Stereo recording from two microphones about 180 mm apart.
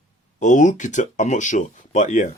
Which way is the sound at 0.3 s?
45° left (ahead or behind).